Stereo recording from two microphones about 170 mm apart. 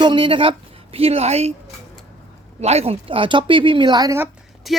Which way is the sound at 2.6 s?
40° right (ahead or behind).